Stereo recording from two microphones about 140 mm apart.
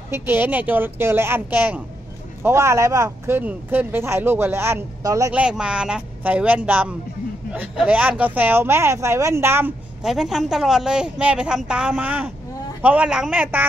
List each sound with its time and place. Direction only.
0.1 s speech: 15° right (ahead or behind)
5.3 s speech: 5° right (ahead or behind)
10.0 s a woman's voice: 5° right (ahead or behind)